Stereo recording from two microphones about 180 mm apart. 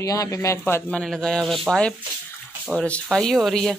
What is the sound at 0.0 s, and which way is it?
Speech, 15° left (ahead or behind).